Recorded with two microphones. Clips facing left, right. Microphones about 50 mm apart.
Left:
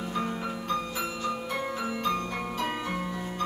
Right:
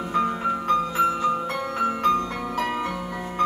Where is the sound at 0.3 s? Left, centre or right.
Right.